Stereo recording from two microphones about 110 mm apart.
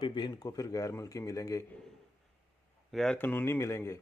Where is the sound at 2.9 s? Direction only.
5° left (ahead or behind).